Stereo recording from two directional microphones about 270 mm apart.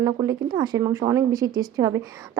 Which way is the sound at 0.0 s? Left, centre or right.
Centre.